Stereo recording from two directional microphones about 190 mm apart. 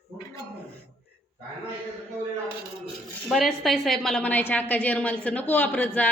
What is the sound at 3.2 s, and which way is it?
A woman's voice, centre (ahead or behind).